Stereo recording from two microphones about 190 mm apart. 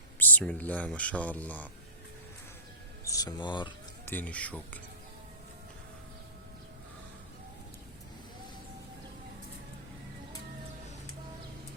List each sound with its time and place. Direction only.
0.2 s speech: 10° left (ahead or behind)
3.0 s speech: 20° left (ahead or behind)
4.0 s speech: 10° left (ahead or behind)